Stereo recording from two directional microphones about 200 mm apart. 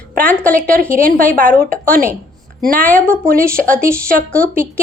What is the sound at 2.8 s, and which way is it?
A woman's voice, 5° left (ahead or behind).